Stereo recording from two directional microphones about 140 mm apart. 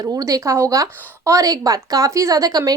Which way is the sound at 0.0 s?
25° right (ahead or behind).